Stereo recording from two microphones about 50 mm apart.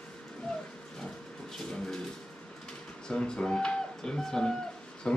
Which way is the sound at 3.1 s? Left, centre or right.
Centre.